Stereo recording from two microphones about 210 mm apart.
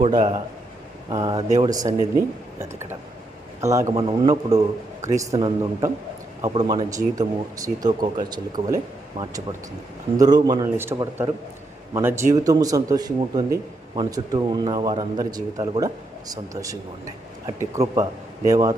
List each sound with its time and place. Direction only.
0.1 s speech: 20° right (ahead or behind)